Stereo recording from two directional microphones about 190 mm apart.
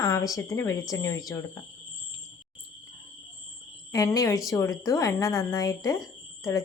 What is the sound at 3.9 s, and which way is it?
Speech, 20° left (ahead or behind).